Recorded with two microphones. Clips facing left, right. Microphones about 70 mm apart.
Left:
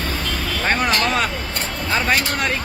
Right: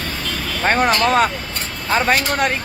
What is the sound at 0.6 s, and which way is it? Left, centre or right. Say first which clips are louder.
Speech: right 4 dB; right.